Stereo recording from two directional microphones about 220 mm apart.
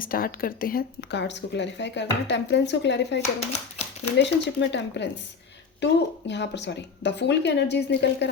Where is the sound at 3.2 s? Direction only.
30° left (ahead or behind).